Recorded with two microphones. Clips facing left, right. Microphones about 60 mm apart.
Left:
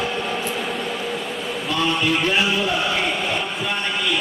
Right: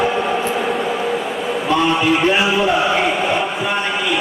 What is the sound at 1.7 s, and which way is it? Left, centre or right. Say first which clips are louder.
A man's voice: right 5 dB; centre.